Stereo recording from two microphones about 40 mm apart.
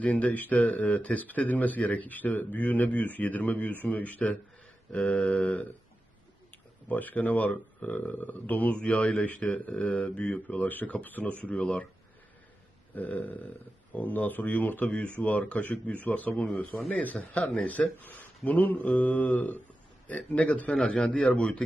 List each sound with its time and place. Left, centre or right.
0.0 s speech: left
6.8 s speech: left
8.7 s a man's voice: left
10.5 s speech: left
11.2 s speech: left
12.9 s speech: left
16.7 s speech: left
17.2 s speech: left
20.1 s a man's voice: left